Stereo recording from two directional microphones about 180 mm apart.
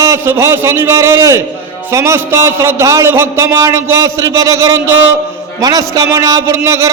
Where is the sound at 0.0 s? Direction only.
15° right (ahead or behind).